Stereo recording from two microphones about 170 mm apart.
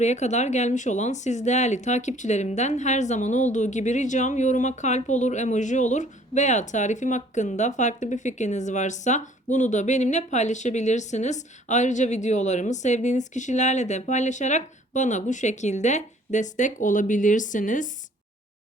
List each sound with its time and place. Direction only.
0.0 s speech: 40° left (ahead or behind)